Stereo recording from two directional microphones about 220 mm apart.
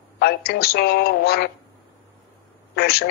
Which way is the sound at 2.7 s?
45° left (ahead or behind).